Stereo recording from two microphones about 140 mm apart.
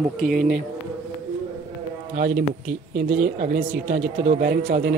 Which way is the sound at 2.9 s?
65° right (ahead or behind).